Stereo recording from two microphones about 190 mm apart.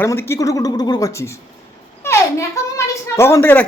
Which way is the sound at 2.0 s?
15° left (ahead or behind).